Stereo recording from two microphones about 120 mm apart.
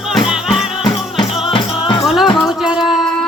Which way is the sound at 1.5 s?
45° left (ahead or behind).